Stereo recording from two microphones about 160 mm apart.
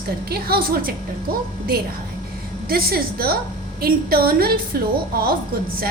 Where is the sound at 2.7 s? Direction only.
70° right (ahead or behind).